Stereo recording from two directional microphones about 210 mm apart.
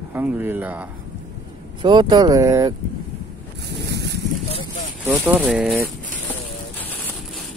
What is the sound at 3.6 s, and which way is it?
Boat, 50° right (ahead or behind).